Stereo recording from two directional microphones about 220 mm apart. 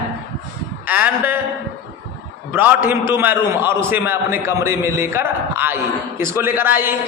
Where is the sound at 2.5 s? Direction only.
10° right (ahead or behind).